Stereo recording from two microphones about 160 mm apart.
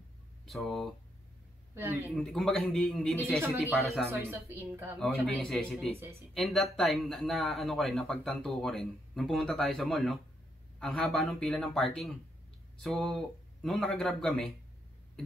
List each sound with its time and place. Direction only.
0.5 s speech: centre (ahead or behind)
1.8 s a woman's voice: 15° right (ahead or behind)
2.1 s speech: 5° left (ahead or behind)
4.1 s a woman's voice: 15° right (ahead or behind)
4.9 s speech: centre (ahead or behind)